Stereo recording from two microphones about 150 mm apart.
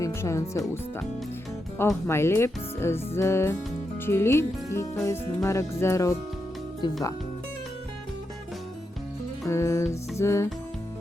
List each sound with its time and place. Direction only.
0.0 s speech: 20° left (ahead or behind)
2.0 s speech: 15° left (ahead or behind)
5.0 s music: 20° left (ahead or behind)
6.8 s music: 30° left (ahead or behind)
9.5 s music: 20° left (ahead or behind)